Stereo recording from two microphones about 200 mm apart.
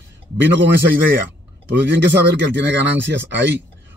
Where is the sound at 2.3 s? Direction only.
60° right (ahead or behind).